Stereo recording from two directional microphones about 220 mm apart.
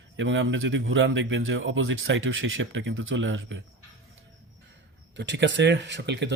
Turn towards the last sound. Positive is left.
turn(degrees=-50)  # may be behind; listen again after turning